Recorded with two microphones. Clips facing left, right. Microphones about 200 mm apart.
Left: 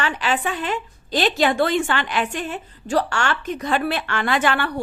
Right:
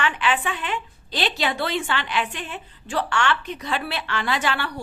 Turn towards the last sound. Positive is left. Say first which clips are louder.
# left 4 dB
turn(degrees=50)  # may be behind; listen again after turning